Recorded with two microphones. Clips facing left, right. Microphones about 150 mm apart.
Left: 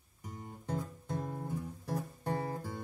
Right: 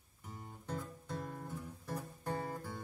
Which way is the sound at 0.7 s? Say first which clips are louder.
Left 4 dB; 15° left (ahead or behind).